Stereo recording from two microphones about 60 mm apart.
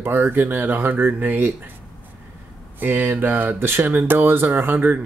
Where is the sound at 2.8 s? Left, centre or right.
Right.